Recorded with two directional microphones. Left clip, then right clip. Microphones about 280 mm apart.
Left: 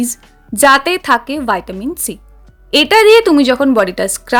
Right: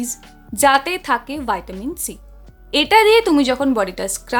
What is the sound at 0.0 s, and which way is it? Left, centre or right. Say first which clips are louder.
A woman's voice: left 7 dB; centre.